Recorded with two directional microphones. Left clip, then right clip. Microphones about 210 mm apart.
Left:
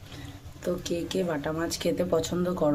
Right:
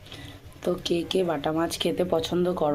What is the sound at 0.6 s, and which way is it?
Speech, 15° right (ahead or behind).